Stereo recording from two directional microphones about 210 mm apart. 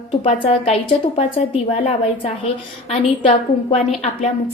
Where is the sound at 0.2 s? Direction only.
25° left (ahead or behind).